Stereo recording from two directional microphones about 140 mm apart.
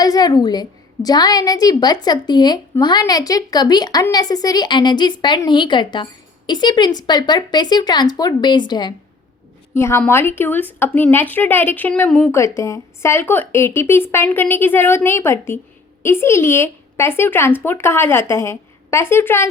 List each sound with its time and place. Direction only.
0.0 s a woman's voice: 25° left (ahead or behind)
9.7 s a woman's voice: 20° left (ahead or behind)
12.5 s speech: 20° left (ahead or behind)